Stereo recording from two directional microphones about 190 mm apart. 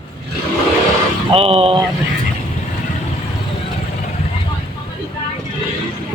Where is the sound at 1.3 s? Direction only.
30° right (ahead or behind).